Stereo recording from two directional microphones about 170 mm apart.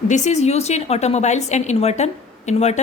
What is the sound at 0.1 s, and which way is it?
A woman's voice, 40° left (ahead or behind).